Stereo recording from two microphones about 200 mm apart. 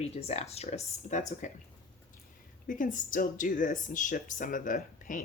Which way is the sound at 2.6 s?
40° left (ahead or behind).